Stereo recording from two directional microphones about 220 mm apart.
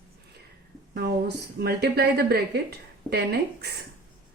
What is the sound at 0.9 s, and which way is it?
Speech, 50° right (ahead or behind).